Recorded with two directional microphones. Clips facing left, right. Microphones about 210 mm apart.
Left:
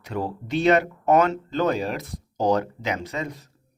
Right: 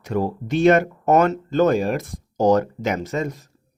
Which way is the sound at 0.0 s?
45° right (ahead or behind).